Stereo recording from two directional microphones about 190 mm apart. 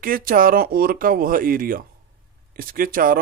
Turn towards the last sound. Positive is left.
turn(degrees=-50)  # may be behind; listen again after turning